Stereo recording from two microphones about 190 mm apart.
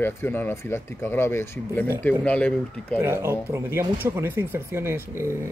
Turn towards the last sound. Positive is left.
turn(degrees=-15)  # may be behind; listen again after turning